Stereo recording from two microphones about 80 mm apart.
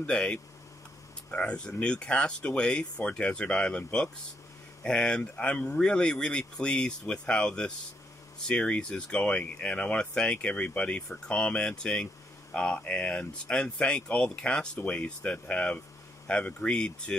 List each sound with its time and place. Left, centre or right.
0.0 s speech: centre